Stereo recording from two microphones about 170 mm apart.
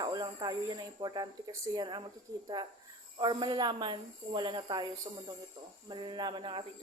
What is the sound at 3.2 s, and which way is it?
Speech, 25° right (ahead or behind).